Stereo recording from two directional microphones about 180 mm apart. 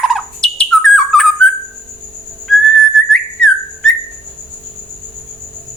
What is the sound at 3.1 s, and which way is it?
Whistling, 5° left (ahead or behind).